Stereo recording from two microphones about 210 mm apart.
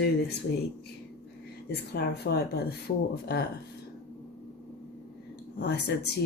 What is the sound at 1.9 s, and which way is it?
Speech, 50° left (ahead or behind).